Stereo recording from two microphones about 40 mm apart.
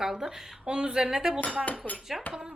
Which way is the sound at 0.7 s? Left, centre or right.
Right.